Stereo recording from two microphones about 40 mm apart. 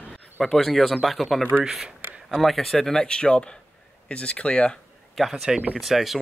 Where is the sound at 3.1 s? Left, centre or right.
Left.